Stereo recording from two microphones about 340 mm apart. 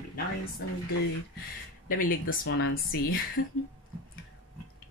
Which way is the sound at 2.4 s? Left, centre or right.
Left.